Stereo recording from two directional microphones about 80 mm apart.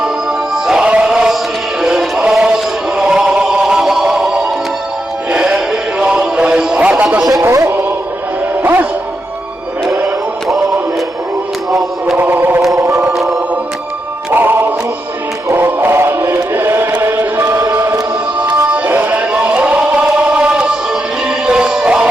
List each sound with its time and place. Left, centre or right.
0.5 s music: centre
7.4 s music: right
8.6 s music: right
12.1 s chant: right
12.7 s choir: right
14.3 s music: right
15.4 s chant: right
18.9 s a sound: centre
21.2 s music: centre